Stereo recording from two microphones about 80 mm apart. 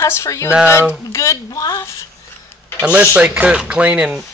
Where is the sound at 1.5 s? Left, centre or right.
Left.